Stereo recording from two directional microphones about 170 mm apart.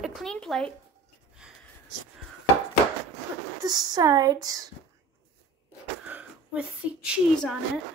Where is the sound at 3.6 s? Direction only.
25° right (ahead or behind).